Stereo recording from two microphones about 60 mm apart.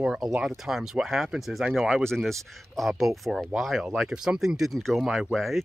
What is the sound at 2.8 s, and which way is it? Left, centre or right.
Speech, centre.